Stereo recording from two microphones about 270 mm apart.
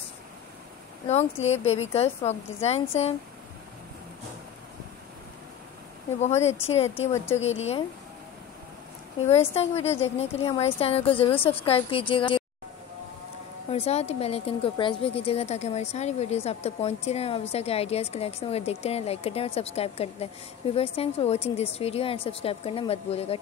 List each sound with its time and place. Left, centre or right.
1.0 s a woman's voice: left
6.1 s a woman's voice: left
9.3 s a woman's voice: left
13.7 s a woman's voice: left